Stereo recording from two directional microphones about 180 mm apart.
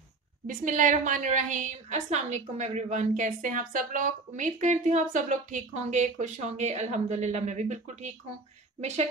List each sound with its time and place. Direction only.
0.5 s a woman's voice: 45° right (ahead or behind)